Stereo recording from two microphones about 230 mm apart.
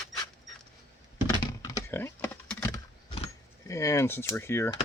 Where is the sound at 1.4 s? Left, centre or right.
Centre.